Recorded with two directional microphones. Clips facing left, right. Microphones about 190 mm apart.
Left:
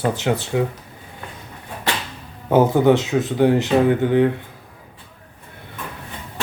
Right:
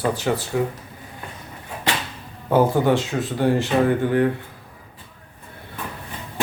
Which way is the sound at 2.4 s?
20° left (ahead or behind).